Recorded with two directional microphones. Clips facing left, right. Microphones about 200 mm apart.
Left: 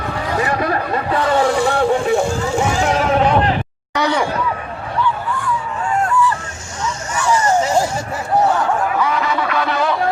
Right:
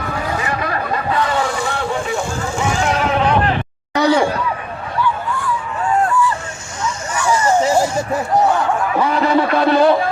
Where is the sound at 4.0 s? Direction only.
40° right (ahead or behind).